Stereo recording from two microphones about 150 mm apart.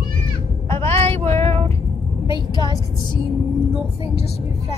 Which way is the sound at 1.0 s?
45° right (ahead or behind).